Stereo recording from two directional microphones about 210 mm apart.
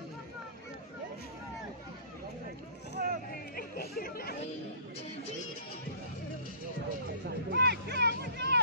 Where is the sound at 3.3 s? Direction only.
45° left (ahead or behind).